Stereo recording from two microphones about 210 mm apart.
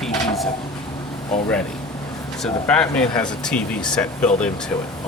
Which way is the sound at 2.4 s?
5° left (ahead or behind).